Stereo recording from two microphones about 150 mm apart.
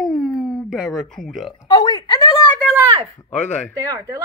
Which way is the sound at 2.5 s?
5° left (ahead or behind).